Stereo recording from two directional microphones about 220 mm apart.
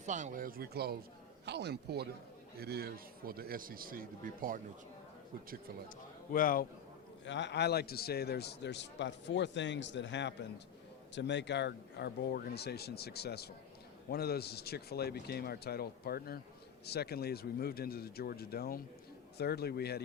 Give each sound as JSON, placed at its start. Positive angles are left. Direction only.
{"t": 0.0, "sound": "a man's voice", "side_deg": -35}
{"t": 6.3, "sound": "a man's voice", "side_deg": 40}
{"t": 7.3, "sound": "a man's voice", "side_deg": 55}